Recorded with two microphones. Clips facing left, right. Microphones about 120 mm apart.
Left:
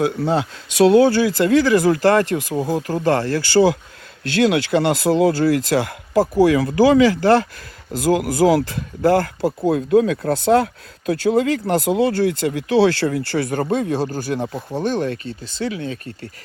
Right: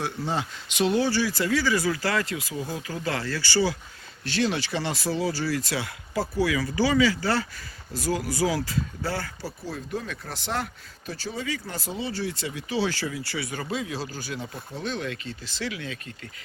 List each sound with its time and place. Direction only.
0.2 s speech: 65° left (ahead or behind); by 3.7 s 50° left (ahead or behind)
4.2 s speech: 65° left (ahead or behind)
9.7 s speech: 90° left; by 14.6 s 65° left (ahead or behind)
14.8 s speech: 55° left (ahead or behind)
15.6 s speech: 35° left (ahead or behind)